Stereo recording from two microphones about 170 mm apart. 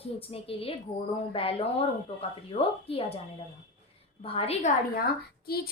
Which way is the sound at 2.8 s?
35° left (ahead or behind).